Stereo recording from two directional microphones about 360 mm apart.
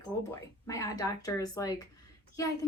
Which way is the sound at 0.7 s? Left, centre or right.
Centre.